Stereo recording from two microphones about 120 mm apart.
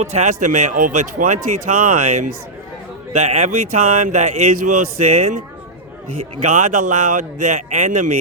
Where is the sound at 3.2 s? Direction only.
80° right.